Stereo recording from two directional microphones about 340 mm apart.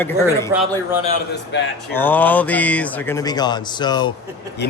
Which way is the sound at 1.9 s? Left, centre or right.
Centre.